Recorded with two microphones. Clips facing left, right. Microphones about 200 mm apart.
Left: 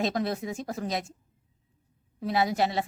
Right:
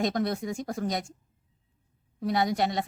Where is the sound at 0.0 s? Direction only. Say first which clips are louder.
Right 1 dB; 25° left (ahead or behind).